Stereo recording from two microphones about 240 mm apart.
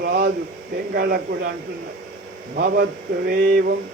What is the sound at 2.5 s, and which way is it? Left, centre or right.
A man's voice, right.